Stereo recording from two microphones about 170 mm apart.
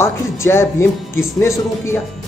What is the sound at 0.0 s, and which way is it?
Speech, 15° left (ahead or behind).